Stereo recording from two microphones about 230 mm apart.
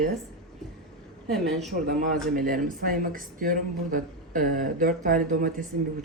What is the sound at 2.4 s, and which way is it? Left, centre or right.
Speech, right.